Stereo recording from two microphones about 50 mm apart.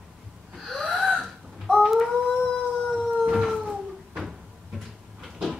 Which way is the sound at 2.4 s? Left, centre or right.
Centre.